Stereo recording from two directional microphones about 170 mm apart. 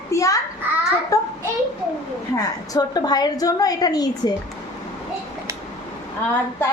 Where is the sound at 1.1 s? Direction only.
20° left (ahead or behind).